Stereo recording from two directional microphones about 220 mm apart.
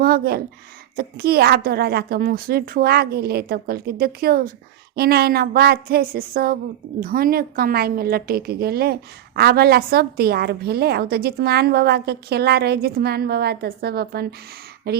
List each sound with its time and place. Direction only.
0.0 s a woman's voice: 45° right (ahead or behind)